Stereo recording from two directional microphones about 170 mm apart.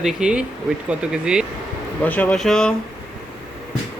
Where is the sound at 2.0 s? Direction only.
10° left (ahead or behind).